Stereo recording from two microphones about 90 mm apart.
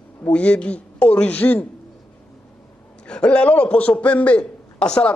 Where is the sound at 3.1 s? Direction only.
10° left (ahead or behind).